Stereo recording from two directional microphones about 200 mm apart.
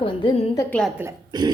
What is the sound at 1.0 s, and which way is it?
Speech, 20° right (ahead or behind).